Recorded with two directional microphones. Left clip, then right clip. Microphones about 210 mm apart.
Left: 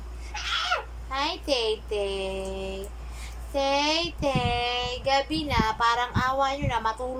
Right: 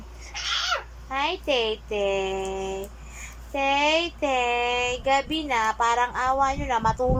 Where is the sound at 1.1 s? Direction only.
15° right (ahead or behind).